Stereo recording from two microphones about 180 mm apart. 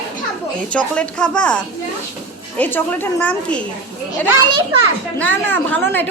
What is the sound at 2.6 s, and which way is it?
A child's voice, 10° left (ahead or behind).